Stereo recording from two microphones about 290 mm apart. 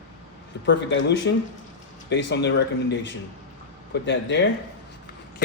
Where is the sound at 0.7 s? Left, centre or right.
Left.